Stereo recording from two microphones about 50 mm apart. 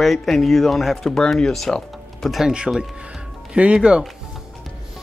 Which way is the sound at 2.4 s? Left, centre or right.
Centre.